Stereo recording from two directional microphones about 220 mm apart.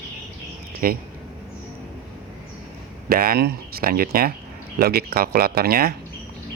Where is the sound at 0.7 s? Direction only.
40° right (ahead or behind).